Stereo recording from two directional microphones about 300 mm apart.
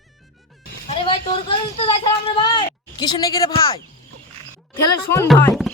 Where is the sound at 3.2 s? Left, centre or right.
Centre.